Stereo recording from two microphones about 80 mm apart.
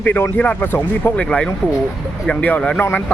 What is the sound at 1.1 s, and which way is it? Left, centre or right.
Speech, centre.